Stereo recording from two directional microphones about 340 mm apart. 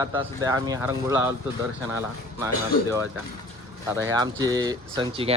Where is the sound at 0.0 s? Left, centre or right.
Centre.